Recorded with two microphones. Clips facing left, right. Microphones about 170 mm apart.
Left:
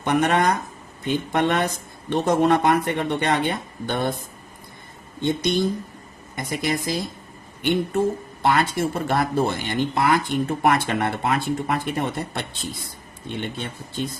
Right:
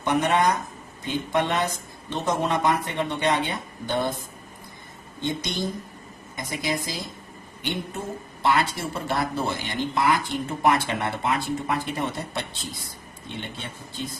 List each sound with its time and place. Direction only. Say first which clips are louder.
0.0 s a woman's voice: left 2 dB; 60° left (ahead or behind)
6.3 s a woman's voice: left 3 dB; 55° left (ahead or behind)